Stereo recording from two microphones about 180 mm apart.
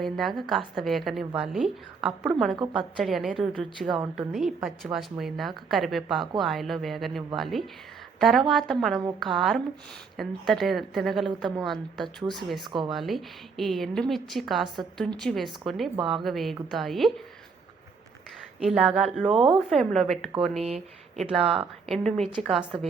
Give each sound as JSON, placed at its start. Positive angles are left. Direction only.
{"t": 0.0, "sound": "a woman's voice", "side_deg": 0}
{"t": 12.5, "sound": "speech", "side_deg": -25}
{"t": 12.9, "sound": "a woman's voice", "side_deg": 0}
{"t": 18.6, "sound": "a woman's voice", "side_deg": -5}
{"t": 19.3, "sound": "a woman's voice", "side_deg": -30}
{"t": 19.5, "sound": "a woman's voice", "side_deg": 0}